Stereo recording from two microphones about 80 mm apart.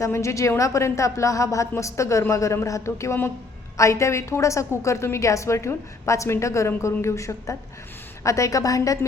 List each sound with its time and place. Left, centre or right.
0.0 s a woman's voice: left